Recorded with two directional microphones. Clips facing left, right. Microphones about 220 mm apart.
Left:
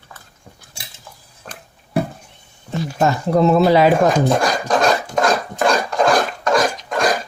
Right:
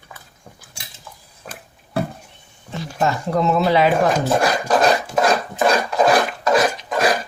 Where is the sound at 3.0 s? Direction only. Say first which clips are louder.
Left 4 dB; 35° left (ahead or behind).